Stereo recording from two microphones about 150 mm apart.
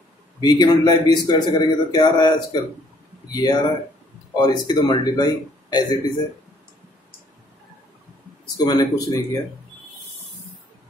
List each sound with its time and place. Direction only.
0.4 s speech: 30° left (ahead or behind)
8.6 s speech: 25° left (ahead or behind)